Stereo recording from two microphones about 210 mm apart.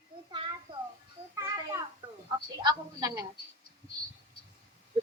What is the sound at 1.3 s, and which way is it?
Children playing, 15° right (ahead or behind).